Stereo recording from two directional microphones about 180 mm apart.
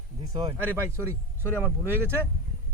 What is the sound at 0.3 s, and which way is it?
Speech, 15° right (ahead or behind).